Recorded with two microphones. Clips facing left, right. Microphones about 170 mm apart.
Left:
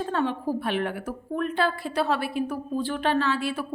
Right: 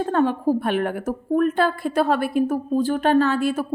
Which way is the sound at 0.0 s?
45° right (ahead or behind).